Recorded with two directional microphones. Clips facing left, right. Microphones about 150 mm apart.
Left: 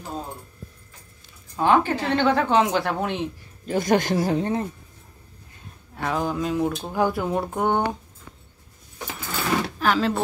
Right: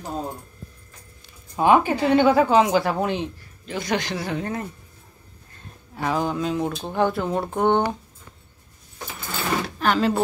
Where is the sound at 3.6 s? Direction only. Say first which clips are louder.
Left 5 dB; 45° left (ahead or behind).